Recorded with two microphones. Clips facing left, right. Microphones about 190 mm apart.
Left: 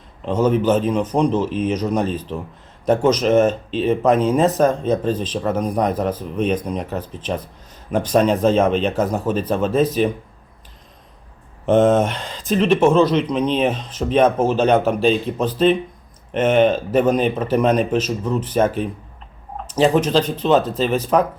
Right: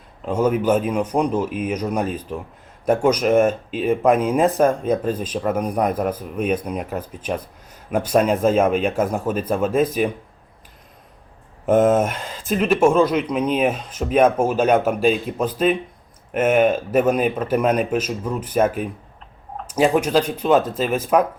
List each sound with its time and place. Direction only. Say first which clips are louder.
0.3 s speech: left 1 dB; 10° right (ahead or behind)
11.6 s speech: left 1 dB; 10° right (ahead or behind)